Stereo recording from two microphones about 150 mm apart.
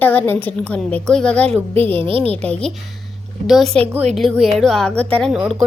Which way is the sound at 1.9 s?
40° right (ahead or behind).